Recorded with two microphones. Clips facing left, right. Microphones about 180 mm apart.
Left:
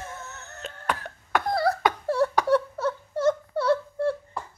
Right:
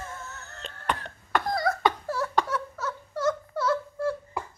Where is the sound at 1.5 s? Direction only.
30° left (ahead or behind).